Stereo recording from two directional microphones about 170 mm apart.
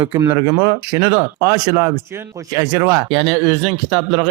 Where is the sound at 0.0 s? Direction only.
20° right (ahead or behind).